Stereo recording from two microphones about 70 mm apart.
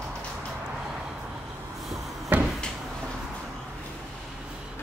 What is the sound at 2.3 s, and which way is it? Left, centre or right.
Cupboard open or close, right.